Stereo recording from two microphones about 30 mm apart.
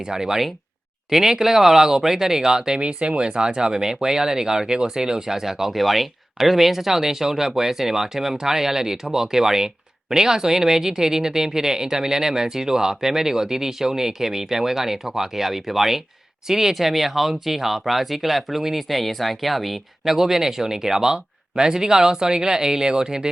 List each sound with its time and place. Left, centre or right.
0.1 s speech: centre
2.8 s speech: right; by 5.7 s centre
5.7 s speech: centre
20.1 s speech: centre